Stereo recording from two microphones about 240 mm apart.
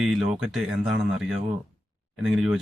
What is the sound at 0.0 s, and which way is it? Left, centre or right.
Speech, centre.